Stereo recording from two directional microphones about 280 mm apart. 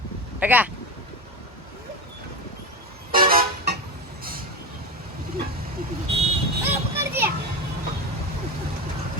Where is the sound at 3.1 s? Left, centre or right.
Right.